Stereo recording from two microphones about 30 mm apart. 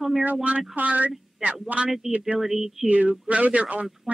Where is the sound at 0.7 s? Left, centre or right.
Right.